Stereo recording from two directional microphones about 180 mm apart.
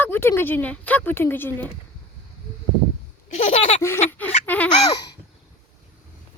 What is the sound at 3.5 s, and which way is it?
Laughter, 40° left (ahead or behind).